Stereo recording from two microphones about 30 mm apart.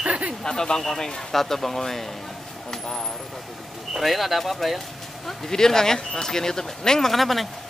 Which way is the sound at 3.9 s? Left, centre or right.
Centre.